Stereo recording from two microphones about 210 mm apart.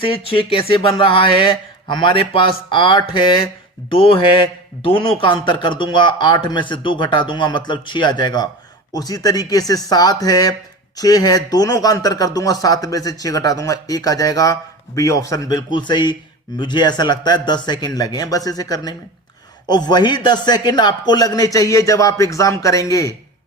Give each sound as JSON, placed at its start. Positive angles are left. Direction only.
{"t": 0.0, "sound": "speech", "side_deg": 25}